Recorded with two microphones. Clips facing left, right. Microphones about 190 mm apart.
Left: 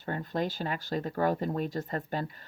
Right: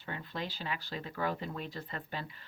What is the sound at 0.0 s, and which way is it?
Speech, 45° left (ahead or behind).